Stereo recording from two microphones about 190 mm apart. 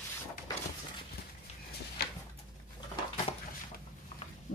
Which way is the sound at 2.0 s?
55° left (ahead or behind).